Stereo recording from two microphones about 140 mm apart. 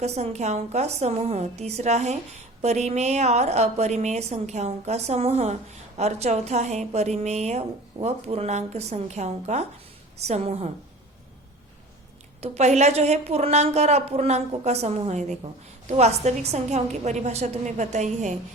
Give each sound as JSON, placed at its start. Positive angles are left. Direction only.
{"t": 0.0, "sound": "a woman's voice", "side_deg": -50}
{"t": 12.4, "sound": "a woman's voice", "side_deg": -55}